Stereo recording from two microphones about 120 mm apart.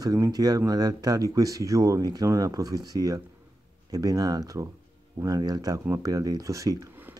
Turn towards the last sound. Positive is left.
turn(degrees=-30)  # may be behind; listen again after turning